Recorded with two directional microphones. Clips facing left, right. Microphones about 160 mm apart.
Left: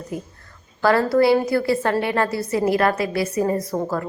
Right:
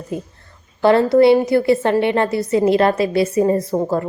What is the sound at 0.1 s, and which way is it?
A woman's voice, 25° right (ahead or behind).